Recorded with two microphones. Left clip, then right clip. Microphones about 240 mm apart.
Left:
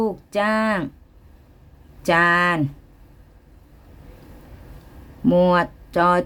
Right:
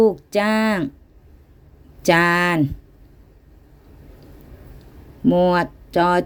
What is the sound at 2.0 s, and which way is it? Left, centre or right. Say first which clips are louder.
Speech: right 1 dB; centre.